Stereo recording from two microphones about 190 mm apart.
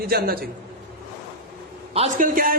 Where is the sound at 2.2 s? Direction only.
50° right (ahead or behind).